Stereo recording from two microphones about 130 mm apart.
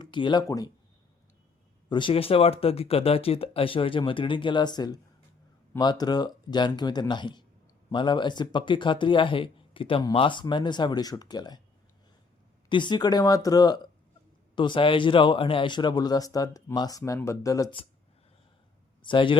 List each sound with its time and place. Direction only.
0.0 s speech: 35° left (ahead or behind)
1.9 s speech: 40° left (ahead or behind)
12.6 s speech: 35° left (ahead or behind)
19.0 s speech: 40° left (ahead or behind)